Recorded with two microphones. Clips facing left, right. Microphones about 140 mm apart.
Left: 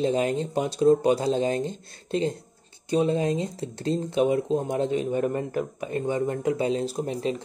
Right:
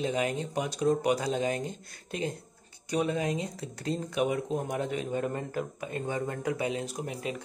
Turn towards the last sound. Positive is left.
turn(degrees=30)  # may be behind; listen again after turning